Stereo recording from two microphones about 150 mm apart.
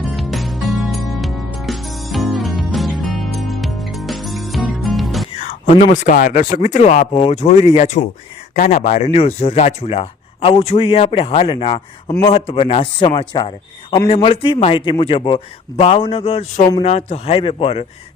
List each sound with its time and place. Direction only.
0.1 s music: centre (ahead or behind)
5.4 s a sound: 55° left (ahead or behind)
5.8 s speech: 65° left (ahead or behind); by 17.8 s 40° left (ahead or behind)